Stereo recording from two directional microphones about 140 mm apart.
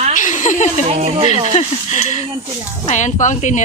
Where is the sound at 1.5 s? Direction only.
50° left (ahead or behind).